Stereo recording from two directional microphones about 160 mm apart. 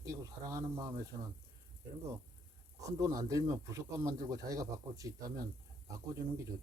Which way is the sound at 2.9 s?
20° right (ahead or behind).